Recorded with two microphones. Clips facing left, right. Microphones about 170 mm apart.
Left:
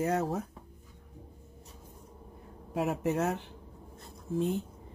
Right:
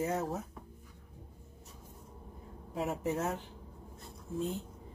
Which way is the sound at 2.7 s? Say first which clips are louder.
Left 4 dB; 70° left (ahead or behind).